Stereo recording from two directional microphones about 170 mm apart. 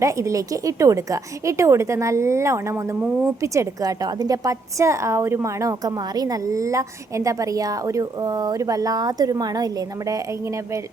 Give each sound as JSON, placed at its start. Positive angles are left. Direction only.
{"t": 0.0, "sound": "a woman's voice", "side_deg": -20}